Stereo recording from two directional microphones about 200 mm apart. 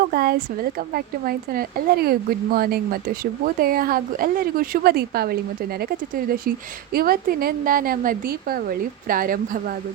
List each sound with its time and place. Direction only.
0.0 s speech: 50° right (ahead or behind)